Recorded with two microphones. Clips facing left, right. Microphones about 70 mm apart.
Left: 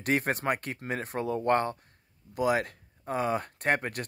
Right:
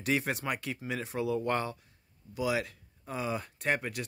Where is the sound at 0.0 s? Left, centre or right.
Left.